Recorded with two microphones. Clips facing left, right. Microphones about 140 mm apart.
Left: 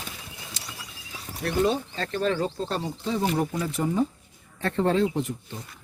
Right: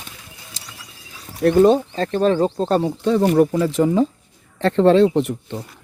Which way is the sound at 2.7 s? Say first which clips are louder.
Right 12 dB; 70° right (ahead or behind).